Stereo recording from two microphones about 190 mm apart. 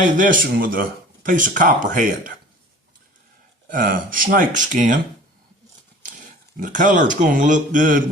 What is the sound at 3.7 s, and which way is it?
Speech, 45° right (ahead or behind).